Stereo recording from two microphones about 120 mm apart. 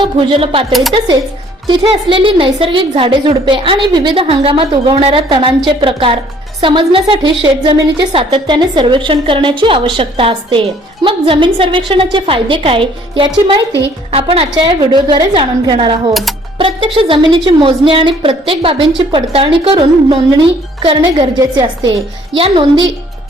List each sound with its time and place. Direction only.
0.0 s a woman's voice: 45° right (ahead or behind)
15.4 s a woman's voice: 50° right (ahead or behind)